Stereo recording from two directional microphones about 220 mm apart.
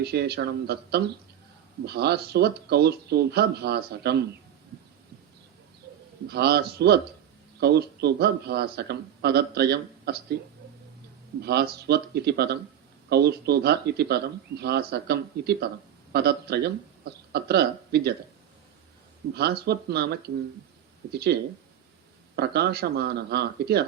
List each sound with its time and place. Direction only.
0.0 s speech: 45° right (ahead or behind)
6.2 s speech: 45° right (ahead or behind)
11.4 s speech: 45° right (ahead or behind)
19.3 s speech: 45° right (ahead or behind)
22.4 s speech: 45° right (ahead or behind)